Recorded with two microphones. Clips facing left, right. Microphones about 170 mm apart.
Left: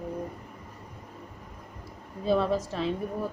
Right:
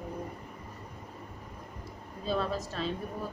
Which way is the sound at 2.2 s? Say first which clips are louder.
Left 6 dB; 15° left (ahead or behind).